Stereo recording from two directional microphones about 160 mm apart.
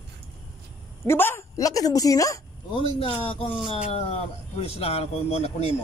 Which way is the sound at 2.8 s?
35° left (ahead or behind).